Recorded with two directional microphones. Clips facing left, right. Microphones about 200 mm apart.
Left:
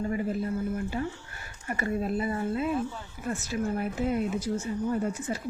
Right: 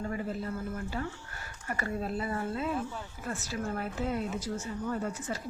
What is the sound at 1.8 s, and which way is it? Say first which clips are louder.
Speech: left 5 dB; 15° left (ahead or behind).